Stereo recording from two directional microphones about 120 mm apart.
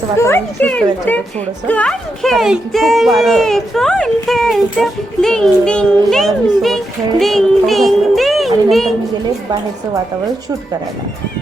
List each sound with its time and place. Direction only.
0.2 s a woman's voice: 20° left (ahead or behind); by 8.9 s centre (ahead or behind)